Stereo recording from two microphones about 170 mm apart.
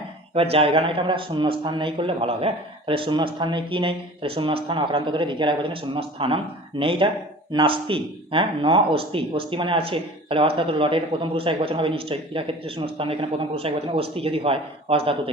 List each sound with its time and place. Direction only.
0.3 s a man's voice: 35° right (ahead or behind)